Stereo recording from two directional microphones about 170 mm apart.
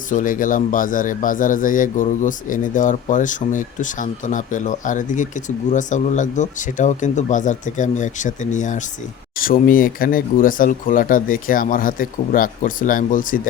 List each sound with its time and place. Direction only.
0.1 s a man's voice: 50° left (ahead or behind)